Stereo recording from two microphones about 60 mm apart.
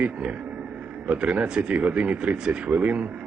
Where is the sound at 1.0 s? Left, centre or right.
Right.